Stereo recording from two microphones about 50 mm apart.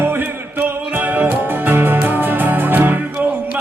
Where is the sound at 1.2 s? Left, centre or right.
Right.